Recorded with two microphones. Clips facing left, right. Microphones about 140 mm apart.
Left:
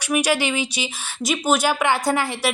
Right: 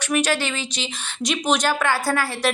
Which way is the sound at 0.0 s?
10° left (ahead or behind).